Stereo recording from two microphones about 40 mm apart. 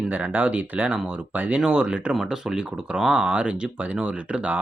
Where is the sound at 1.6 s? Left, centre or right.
Right.